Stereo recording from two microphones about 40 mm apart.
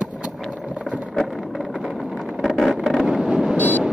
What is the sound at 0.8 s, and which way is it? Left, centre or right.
Vehicle, right.